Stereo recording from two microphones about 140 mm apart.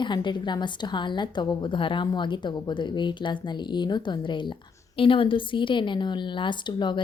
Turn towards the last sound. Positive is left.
turn(degrees=35)  # may be behind; listen again after turning